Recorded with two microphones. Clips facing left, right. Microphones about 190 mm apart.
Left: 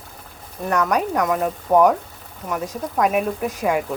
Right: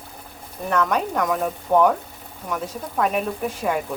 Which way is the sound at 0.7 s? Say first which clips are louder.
Left 2 dB; 10° left (ahead or behind).